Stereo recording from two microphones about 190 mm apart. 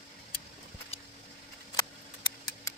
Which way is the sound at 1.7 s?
20° left (ahead or behind).